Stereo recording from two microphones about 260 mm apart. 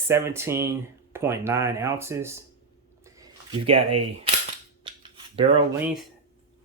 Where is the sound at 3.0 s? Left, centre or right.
Centre.